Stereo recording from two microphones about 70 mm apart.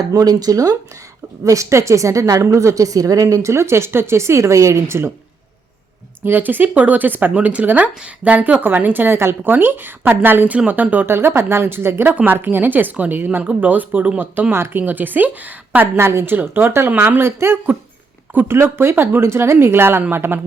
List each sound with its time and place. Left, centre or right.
0.0 s speech: right
1.5 s a woman's voice: right
6.2 s a woman's voice: right
16.0 s speech: right